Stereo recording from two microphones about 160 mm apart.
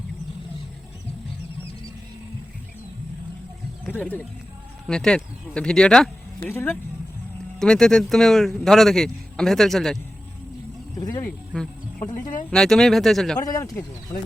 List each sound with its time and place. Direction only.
3.8 s speech: 10° left (ahead or behind)
11.0 s speech: 25° left (ahead or behind)
12.5 s speech: 5° left (ahead or behind)
13.4 s speech: 25° left (ahead or behind)